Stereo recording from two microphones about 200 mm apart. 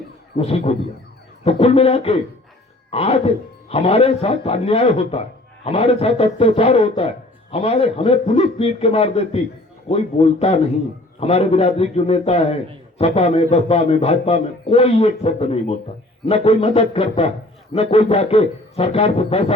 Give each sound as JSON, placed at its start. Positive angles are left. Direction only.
{"t": 0.3, "sound": "a man's voice", "side_deg": 30}